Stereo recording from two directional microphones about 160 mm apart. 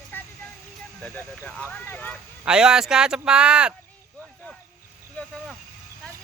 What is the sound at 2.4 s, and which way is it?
Speech, 5° right (ahead or behind).